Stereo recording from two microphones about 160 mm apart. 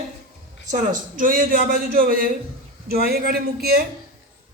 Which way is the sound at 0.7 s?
60° right (ahead or behind).